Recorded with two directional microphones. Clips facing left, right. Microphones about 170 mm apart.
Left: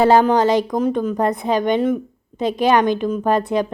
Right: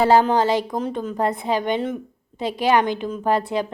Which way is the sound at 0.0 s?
15° left (ahead or behind).